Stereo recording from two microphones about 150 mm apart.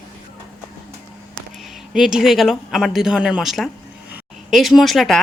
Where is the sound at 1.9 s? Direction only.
5° right (ahead or behind).